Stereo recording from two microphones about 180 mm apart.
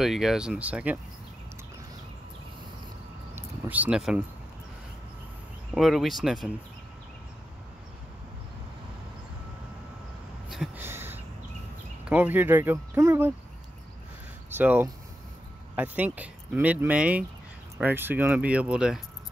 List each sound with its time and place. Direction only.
0.0 s speech: centre (ahead or behind)
3.3 s a sound: 10° right (ahead or behind)
5.8 s speech: centre (ahead or behind)
10.5 s a sound: 5° right (ahead or behind)
12.1 s speech: 10° right (ahead or behind)
14.5 s speech: 10° right (ahead or behind)